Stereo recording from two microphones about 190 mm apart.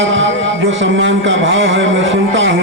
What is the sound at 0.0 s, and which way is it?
Music, 80° right.